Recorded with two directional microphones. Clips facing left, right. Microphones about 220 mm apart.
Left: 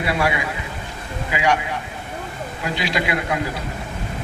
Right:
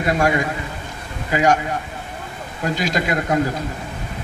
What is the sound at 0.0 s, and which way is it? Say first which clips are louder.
A man's voice: right 3 dB; 45° right (ahead or behind).